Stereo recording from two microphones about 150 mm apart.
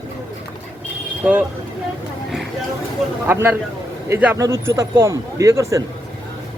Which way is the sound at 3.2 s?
15° right (ahead or behind).